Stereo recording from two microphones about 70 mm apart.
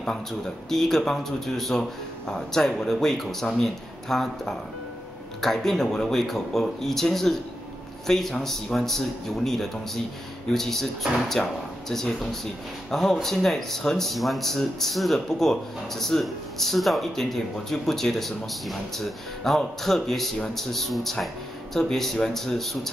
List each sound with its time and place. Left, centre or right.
0.0 s speech: centre